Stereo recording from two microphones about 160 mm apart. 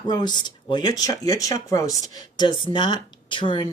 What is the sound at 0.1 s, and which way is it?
Speech, 25° left (ahead or behind).